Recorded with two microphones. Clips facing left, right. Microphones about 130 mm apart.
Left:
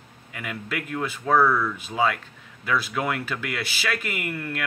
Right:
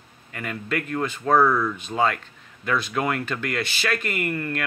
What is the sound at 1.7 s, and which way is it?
Speech, 5° left (ahead or behind).